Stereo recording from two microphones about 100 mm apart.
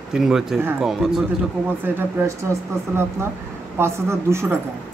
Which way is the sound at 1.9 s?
20° right (ahead or behind).